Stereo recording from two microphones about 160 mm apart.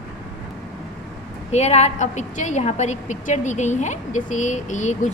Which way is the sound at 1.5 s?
45° left (ahead or behind).